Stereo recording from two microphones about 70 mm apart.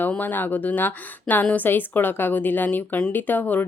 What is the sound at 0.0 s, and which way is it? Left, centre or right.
Speech, left.